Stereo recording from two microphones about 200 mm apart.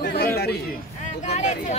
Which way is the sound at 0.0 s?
55° left (ahead or behind).